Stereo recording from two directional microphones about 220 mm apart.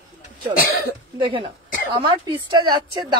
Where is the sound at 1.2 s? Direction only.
20° right (ahead or behind).